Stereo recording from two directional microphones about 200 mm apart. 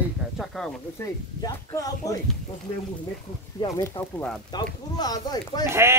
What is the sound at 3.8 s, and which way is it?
Speech, 10° left (ahead or behind).